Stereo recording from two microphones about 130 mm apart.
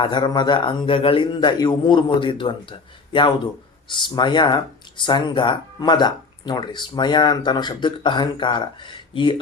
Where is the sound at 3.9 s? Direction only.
35° left (ahead or behind).